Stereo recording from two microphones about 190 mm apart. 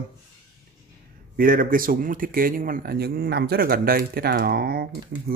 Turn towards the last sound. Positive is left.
turn(degrees=-55)  # may be behind; listen again after turning